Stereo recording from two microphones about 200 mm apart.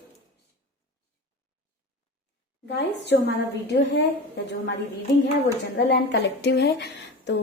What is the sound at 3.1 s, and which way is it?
Speech, 60° left (ahead or behind).